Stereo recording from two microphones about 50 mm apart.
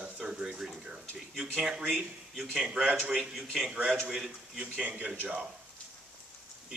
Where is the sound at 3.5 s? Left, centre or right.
Centre.